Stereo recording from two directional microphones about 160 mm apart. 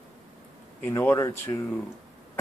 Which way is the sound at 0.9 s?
15° left (ahead or behind).